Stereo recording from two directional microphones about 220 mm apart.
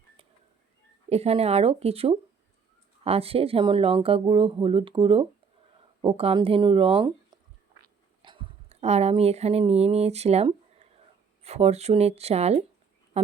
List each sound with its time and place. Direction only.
1.1 s speech: 30° right (ahead or behind)
8.2 s speech: 25° right (ahead or behind)